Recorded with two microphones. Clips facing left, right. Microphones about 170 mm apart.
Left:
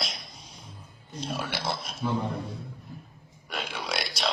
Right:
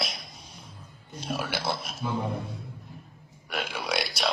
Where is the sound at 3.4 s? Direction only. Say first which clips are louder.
Right 2 dB; 5° right (ahead or behind).